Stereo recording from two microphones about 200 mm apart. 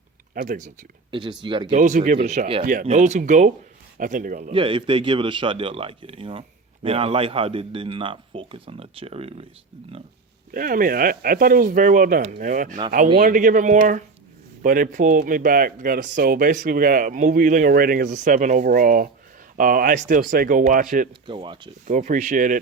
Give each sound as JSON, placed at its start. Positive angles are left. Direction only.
{"t": 0.4, "sound": "speech", "side_deg": -40}
{"t": 1.1, "sound": "a man's voice", "side_deg": -25}
{"t": 1.7, "sound": "speech", "side_deg": -40}
{"t": 4.5, "sound": "a man's voice", "side_deg": -25}
{"t": 10.5, "sound": "speech", "side_deg": -45}
{"t": 21.2, "sound": "a man's voice", "side_deg": -25}
{"t": 21.8, "sound": "speech", "side_deg": -40}